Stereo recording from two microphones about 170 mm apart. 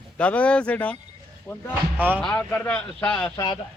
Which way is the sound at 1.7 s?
10° right (ahead or behind).